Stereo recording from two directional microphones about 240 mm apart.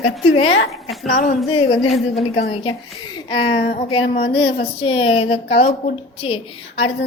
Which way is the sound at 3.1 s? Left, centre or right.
Left.